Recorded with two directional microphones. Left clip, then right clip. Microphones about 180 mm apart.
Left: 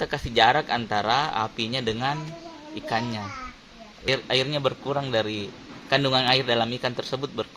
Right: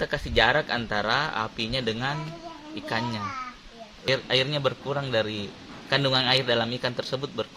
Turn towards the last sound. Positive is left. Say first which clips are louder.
# left 1 dB
turn(degrees=15)  # may be behind; listen again after turning